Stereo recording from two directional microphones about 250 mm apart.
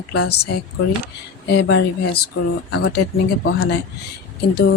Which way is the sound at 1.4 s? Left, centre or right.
Left.